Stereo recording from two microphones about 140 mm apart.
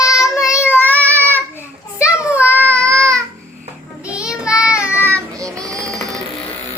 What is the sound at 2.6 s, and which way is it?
Child singing, 20° right (ahead or behind).